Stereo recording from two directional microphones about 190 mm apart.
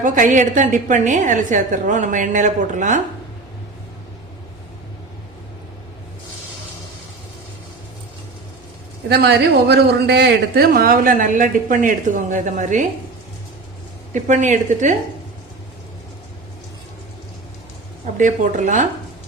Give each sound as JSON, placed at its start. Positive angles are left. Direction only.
{"t": 0.0, "sound": "a woman's voice", "side_deg": -45}
{"t": 9.0, "sound": "a man's voice", "side_deg": -60}
{"t": 14.1, "sound": "a woman's voice", "side_deg": -40}
{"t": 18.0, "sound": "a woman's voice", "side_deg": -40}